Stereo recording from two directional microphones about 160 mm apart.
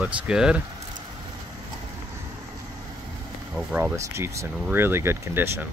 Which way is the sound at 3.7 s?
10° right (ahead or behind).